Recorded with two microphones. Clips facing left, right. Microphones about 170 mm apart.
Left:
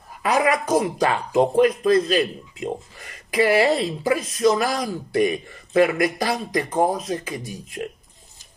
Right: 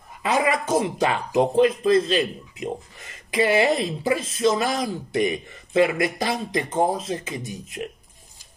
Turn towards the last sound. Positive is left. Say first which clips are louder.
# left 1 dB
turn(degrees=-20)  # may be behind; listen again after turning